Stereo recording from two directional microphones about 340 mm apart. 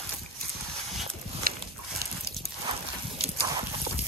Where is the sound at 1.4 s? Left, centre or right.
Right.